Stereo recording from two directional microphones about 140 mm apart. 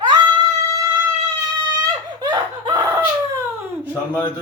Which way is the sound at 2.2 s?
30° right (ahead or behind).